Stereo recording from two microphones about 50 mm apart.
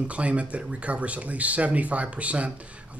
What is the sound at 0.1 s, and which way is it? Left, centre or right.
Speech, right.